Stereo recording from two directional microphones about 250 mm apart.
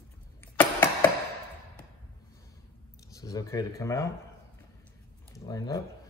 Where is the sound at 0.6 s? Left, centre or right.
Centre.